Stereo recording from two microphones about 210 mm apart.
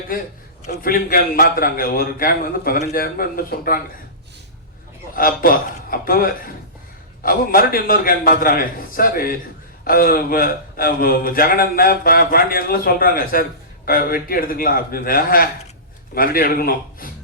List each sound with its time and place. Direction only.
0.6 s a man's voice: 40° left (ahead or behind)
5.1 s a man's voice: 45° left (ahead or behind)